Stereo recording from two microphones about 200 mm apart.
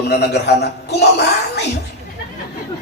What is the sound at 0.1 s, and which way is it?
A woman's voice, 55° left (ahead or behind).